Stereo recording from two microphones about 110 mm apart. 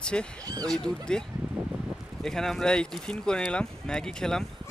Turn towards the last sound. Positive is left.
turn(degrees=5)  # may be behind; listen again after turning